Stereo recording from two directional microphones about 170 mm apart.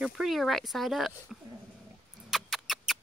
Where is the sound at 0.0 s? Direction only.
Centre (ahead or behind).